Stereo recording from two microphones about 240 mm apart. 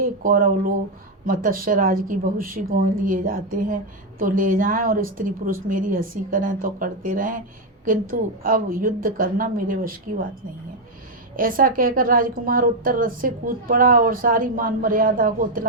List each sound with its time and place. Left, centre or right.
0.0 s a woman's voice: right
11.3 s a woman's voice: right